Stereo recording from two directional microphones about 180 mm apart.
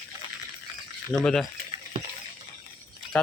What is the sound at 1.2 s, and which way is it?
Speech, 5° left (ahead or behind).